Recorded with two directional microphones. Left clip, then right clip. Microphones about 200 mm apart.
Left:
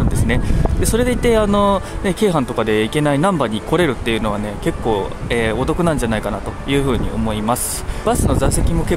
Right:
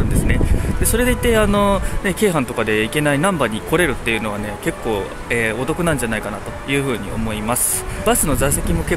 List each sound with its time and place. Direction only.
0.9 s speech: 15° left (ahead or behind)